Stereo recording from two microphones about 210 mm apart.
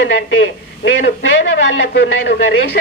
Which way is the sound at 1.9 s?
50° left (ahead or behind).